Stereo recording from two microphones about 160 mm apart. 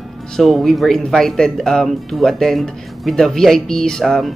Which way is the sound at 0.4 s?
Centre (ahead or behind).